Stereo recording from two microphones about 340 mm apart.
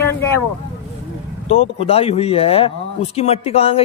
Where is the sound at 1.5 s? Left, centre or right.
Centre.